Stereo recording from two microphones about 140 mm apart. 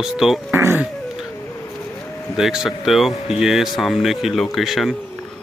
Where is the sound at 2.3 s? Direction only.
Centre (ahead or behind).